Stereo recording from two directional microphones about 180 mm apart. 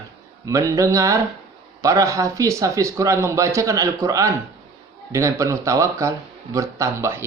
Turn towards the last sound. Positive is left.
turn(degrees=-15)  # may be behind; listen again after turning